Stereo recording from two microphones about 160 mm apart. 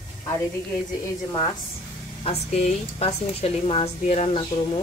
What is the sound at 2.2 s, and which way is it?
Speech, 40° left (ahead or behind).